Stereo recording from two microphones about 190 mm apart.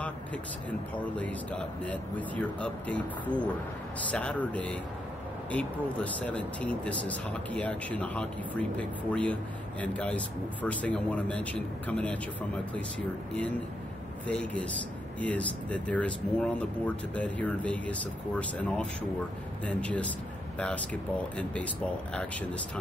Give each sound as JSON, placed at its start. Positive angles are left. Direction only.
{"t": 0.0, "sound": "speech", "side_deg": 5}
{"t": 14.2, "sound": "speech", "side_deg": 5}